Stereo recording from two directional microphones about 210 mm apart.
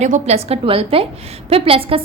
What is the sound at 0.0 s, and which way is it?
A woman's voice, 30° right (ahead or behind).